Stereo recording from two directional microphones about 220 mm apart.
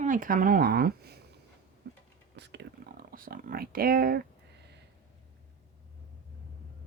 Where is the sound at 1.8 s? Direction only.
50° right (ahead or behind).